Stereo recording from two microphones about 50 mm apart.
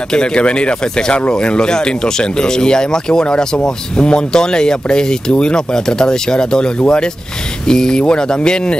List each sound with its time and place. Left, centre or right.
0.1 s speech: centre